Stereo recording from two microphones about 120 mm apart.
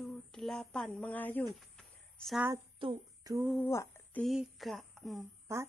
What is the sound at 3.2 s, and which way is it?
Speech, 25° right (ahead or behind).